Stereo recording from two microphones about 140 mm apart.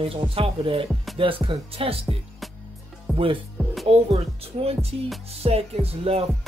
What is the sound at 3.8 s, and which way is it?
Speech, 45° right (ahead or behind).